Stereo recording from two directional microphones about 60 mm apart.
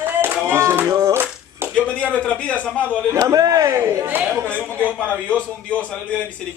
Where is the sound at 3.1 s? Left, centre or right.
Right.